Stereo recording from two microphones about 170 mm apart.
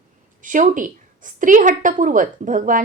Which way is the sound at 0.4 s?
50° right (ahead or behind).